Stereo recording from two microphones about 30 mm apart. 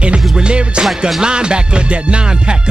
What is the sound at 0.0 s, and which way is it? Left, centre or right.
Music, right.